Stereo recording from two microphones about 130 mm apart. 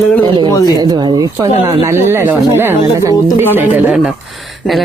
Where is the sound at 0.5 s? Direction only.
30° left (ahead or behind).